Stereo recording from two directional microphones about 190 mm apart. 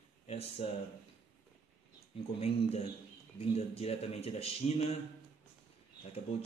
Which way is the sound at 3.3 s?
35° left (ahead or behind).